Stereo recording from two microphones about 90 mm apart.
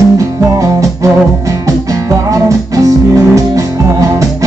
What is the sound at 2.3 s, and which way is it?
Music, 40° right (ahead or behind).